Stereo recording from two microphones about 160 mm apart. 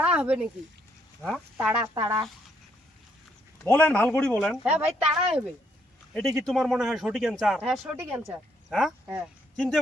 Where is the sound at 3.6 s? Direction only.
10° left (ahead or behind).